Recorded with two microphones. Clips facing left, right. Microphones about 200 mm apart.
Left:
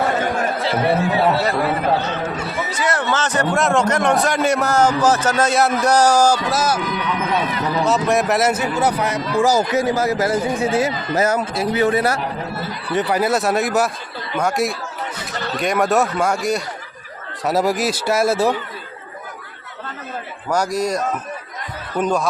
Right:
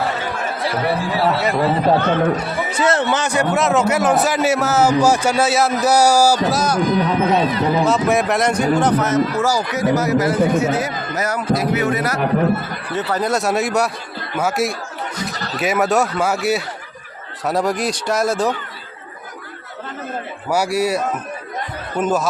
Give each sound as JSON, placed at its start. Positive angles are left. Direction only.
{"t": 0.6, "sound": "speech", "side_deg": 25}
{"t": 2.0, "sound": "speech", "side_deg": -55}
{"t": 2.3, "sound": "a man's voice", "side_deg": -25}
{"t": 6.5, "sound": "speech", "side_deg": 5}
{"t": 6.7, "sound": "speech", "side_deg": -35}
{"t": 7.9, "sound": "speech", "side_deg": 0}
{"t": 12.2, "sound": "speech", "side_deg": -60}
{"t": 12.9, "sound": "speech", "side_deg": 15}
{"t": 20.5, "sound": "a man's voice", "side_deg": -10}